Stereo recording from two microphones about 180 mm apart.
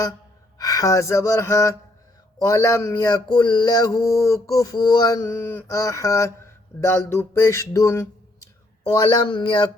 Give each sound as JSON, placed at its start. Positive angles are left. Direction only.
{"t": 0.6, "sound": "male singing", "side_deg": 20}
{"t": 9.0, "sound": "speech", "side_deg": 25}